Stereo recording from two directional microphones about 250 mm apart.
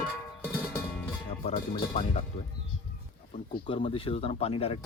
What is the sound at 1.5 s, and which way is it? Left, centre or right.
Speech, left.